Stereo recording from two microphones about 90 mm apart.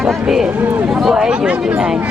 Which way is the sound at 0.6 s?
20° right (ahead or behind).